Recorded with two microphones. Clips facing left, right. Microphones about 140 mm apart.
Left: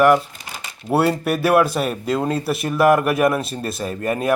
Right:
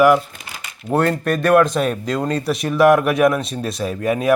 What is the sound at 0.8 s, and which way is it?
A man's voice, 10° left (ahead or behind).